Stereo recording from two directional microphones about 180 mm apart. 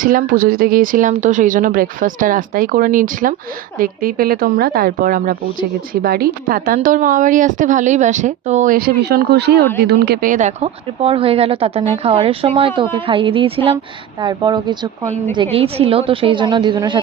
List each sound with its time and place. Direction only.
0.0 s a woman's voice: 50° right (ahead or behind); by 17.0 s 25° right (ahead or behind)